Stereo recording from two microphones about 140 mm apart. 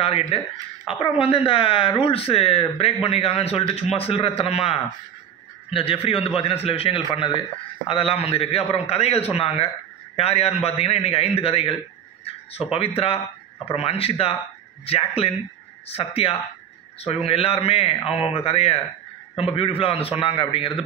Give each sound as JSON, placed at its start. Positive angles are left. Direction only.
{"t": 0.0, "sound": "speech", "side_deg": 45}
{"t": 12.7, "sound": "a man's voice", "side_deg": 40}